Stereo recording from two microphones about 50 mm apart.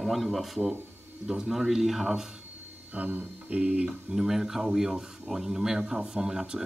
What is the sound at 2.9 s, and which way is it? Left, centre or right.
Speech, right.